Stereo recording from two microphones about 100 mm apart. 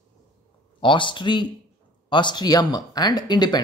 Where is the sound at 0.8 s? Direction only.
55° left (ahead or behind).